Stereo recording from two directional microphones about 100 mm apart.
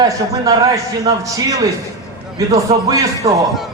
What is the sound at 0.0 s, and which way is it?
A man's voice, 40° right (ahead or behind).